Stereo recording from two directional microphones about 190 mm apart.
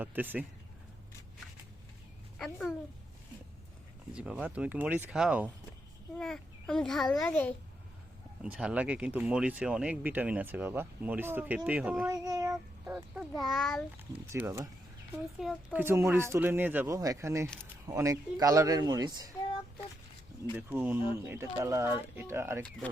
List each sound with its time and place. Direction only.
0.0 s speech: 10° right (ahead or behind)
2.4 s a child's voice: centre (ahead or behind)
4.1 s a child's voice: 5° right (ahead or behind)
8.4 s speech: 5° right (ahead or behind)
12.0 s speech: 20° right (ahead or behind)
12.8 s a child's voice: 10° right (ahead or behind)
14.3 s speech: 15° right (ahead or behind)
20.6 s speech: 10° right (ahead or behind)